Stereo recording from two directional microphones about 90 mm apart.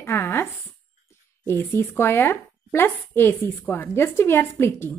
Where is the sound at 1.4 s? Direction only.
25° left (ahead or behind).